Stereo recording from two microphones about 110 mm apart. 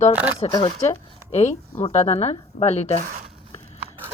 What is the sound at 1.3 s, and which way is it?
A woman's voice, 85° left.